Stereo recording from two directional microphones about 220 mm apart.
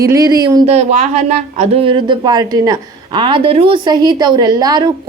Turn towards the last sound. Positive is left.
turn(degrees=-20)  # may be behind; listen again after turning